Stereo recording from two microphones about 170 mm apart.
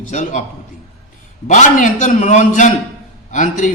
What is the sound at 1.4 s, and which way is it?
Speech, 45° left (ahead or behind).